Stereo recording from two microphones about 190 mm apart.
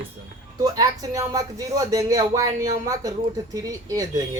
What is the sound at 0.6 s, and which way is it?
Speech, 20° right (ahead or behind).